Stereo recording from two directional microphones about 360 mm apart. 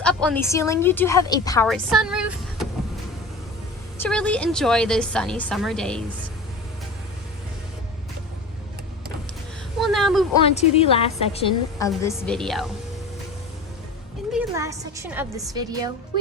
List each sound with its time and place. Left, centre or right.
0.0 s a woman's voice: centre
3.9 s a woman's voice: centre
9.8 s speech: centre
10.4 s a woman's voice: centre
11.9 s a woman's voice: centre
14.3 s a woman's voice: centre